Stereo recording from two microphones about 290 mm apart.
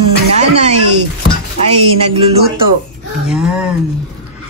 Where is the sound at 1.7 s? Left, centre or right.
Right.